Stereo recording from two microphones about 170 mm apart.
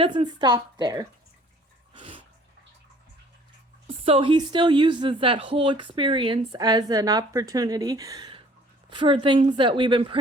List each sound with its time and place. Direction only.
0.0 s a woman's voice: 30° right (ahead or behind)
1.9 s dog: 30° right (ahead or behind)
3.8 s a woman's voice: 35° right (ahead or behind)